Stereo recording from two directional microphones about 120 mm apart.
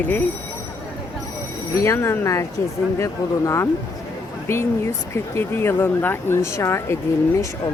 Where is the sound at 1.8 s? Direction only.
25° left (ahead or behind).